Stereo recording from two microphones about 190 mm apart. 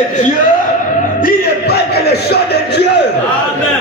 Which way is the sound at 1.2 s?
60° left (ahead or behind).